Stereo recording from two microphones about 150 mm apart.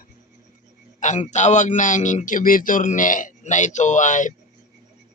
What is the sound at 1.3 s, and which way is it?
Speech, 50° left (ahead or behind).